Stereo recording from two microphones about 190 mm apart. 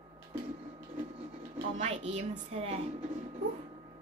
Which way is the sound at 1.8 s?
35° right (ahead or behind).